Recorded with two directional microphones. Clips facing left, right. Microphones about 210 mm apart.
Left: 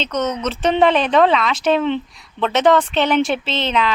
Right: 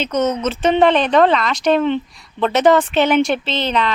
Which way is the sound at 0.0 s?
10° right (ahead or behind).